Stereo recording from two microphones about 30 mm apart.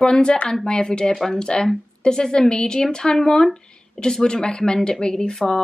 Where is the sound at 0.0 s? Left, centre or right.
Left.